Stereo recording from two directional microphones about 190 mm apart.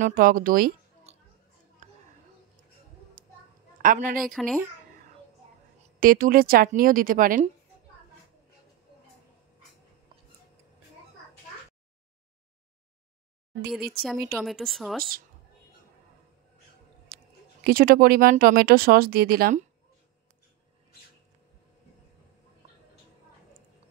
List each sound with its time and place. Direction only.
0.0 s speech: 45° right (ahead or behind)
1.1 s a sound: 35° right (ahead or behind)
3.2 s a sound: 45° right (ahead or behind)
3.8 s speech: 45° right (ahead or behind)
4.2 s speech: centre (ahead or behind)
5.9 s speech: 45° right (ahead or behind)
13.7 s speech: centre (ahead or behind)
17.6 s speech: 50° right (ahead or behind)